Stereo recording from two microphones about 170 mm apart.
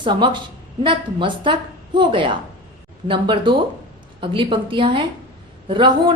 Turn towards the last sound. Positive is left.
turn(degrees=-30)  # may be behind; listen again after turning